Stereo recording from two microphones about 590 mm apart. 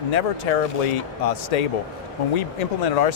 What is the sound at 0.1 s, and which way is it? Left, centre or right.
Speech, left.